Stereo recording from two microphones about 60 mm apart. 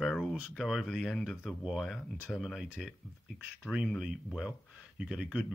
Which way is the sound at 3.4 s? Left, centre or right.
Centre.